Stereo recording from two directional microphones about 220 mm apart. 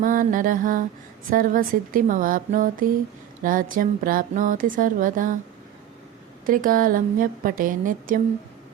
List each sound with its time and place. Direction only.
0.0 s speech: 40° right (ahead or behind)
6.4 s speech: 40° right (ahead or behind)